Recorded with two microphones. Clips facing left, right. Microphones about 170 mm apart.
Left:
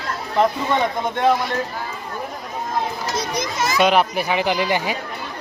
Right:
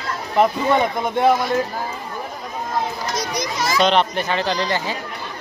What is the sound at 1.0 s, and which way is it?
Speech, 10° right (ahead or behind).